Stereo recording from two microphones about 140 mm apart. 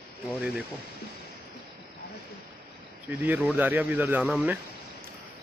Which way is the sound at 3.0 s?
10° right (ahead or behind).